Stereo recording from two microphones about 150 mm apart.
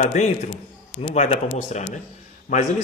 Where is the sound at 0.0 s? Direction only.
50° left (ahead or behind).